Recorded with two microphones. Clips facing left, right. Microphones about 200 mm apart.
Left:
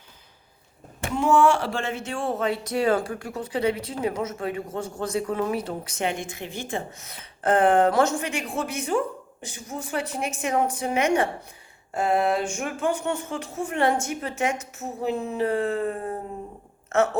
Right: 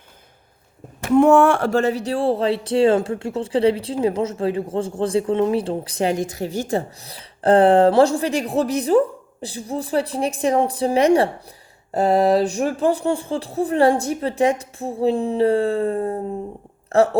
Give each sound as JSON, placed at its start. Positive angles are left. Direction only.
{"t": 1.1, "sound": "speech", "side_deg": -60}